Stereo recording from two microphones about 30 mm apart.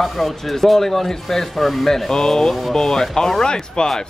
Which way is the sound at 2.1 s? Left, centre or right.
Centre.